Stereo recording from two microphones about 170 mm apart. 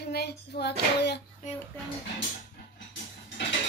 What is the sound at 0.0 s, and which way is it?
Child singing, 70° left (ahead or behind).